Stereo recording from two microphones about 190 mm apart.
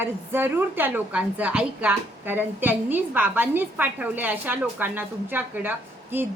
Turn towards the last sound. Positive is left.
turn(degrees=-10)  # may be behind; listen again after turning